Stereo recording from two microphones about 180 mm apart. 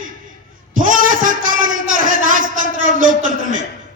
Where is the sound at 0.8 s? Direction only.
50° right (ahead or behind).